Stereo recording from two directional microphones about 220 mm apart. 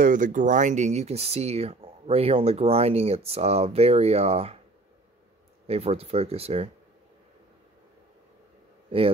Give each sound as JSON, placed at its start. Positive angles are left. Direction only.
{"t": 0.0, "sound": "speech", "side_deg": -35}
{"t": 5.7, "sound": "speech", "side_deg": -30}